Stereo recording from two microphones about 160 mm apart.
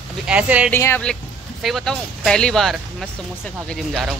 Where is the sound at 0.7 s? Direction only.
15° left (ahead or behind).